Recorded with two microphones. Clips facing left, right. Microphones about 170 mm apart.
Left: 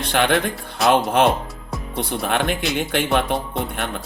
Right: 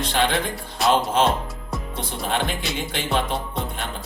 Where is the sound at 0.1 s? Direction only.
60° left (ahead or behind).